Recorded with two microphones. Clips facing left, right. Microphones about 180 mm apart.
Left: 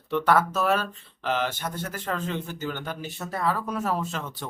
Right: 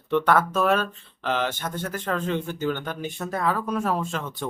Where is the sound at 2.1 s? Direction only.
50° right (ahead or behind).